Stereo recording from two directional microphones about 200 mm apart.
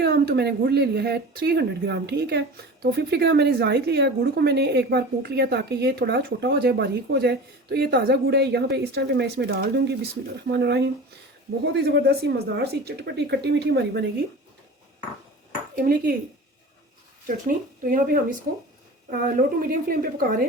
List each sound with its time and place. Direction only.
0.0 s a woman's voice: 55° right (ahead or behind)
15.7 s speech: 50° right (ahead or behind)
17.2 s a woman's voice: 45° right (ahead or behind)